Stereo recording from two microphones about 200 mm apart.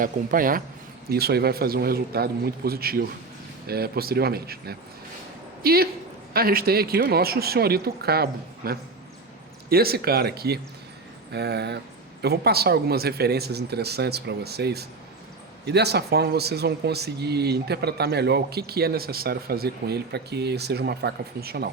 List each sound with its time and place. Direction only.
0.0 s speech: 45° right (ahead or behind)